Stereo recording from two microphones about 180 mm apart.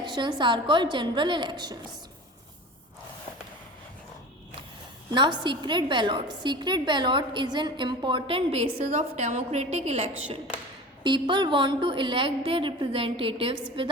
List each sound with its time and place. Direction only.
0.0 s a woman's voice: 25° right (ahead or behind)
5.1 s a woman's voice: 25° right (ahead or behind)
11.0 s a woman's voice: 25° right (ahead or behind)